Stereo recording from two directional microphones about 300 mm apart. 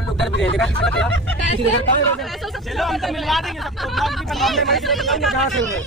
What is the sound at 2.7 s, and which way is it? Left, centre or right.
Speech, centre.